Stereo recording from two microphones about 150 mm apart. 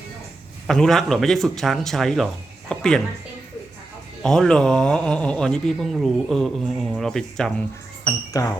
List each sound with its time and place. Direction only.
0.7 s speech: 5° left (ahead or behind)
4.2 s speech: 5° left (ahead or behind)
8.3 s speech: 25° left (ahead or behind)